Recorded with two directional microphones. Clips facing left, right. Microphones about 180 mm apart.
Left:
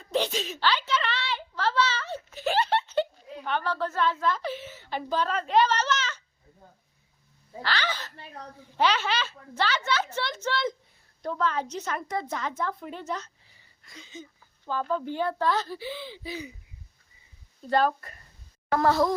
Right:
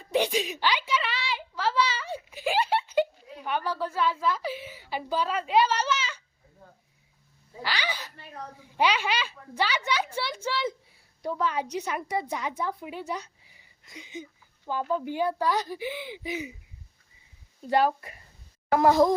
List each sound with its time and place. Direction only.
0.0 s a sound: 15° right (ahead or behind)
7.6 s a woman's voice: 10° right (ahead or behind)
17.7 s a woman's voice: 15° right (ahead or behind)